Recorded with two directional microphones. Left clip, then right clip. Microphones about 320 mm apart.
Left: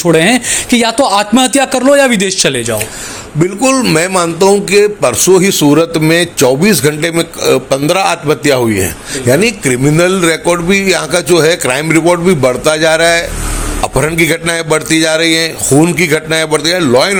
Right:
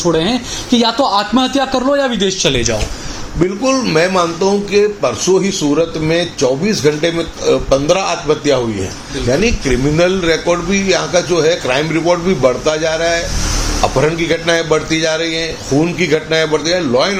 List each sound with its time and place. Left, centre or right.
0.0 s a man's voice: left